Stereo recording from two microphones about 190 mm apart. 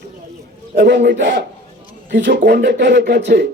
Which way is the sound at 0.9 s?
65° right (ahead or behind).